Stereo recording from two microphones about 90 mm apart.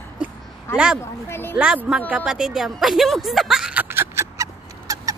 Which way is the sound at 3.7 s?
25° right (ahead or behind).